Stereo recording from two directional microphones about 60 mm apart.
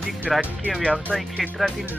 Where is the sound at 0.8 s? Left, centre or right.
Centre.